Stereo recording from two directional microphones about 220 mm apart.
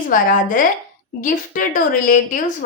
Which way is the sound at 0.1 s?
35° left (ahead or behind).